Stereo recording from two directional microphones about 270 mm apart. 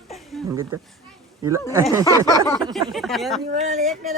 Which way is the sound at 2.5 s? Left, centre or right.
Centre.